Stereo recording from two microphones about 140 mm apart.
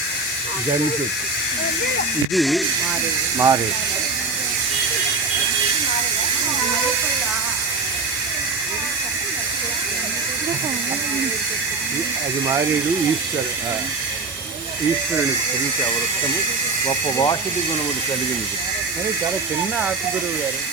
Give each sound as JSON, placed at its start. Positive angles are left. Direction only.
{"t": 2.3, "sound": "speech", "side_deg": 0}
{"t": 3.3, "sound": "speech", "side_deg": -25}